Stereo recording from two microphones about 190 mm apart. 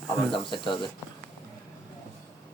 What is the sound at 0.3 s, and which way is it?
Speech, 25° left (ahead or behind).